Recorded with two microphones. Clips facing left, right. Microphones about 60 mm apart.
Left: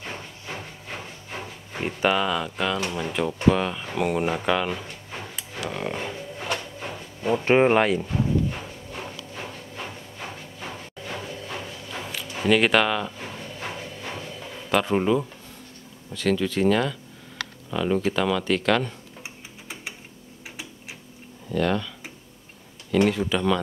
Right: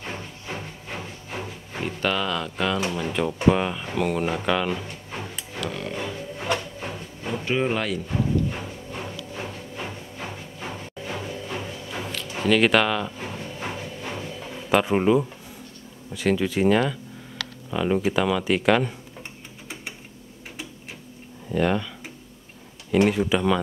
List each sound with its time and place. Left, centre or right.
0.0 s hiss: centre
1.9 s speech: centre
5.8 s a sound: centre
6.3 s a sound: centre
7.4 s speech: left
8.1 s clip-clop: centre
9.1 s music: centre
12.4 s a sound: centre
16.1 s speech: centre
21.5 s speech: centre
22.8 s speech: centre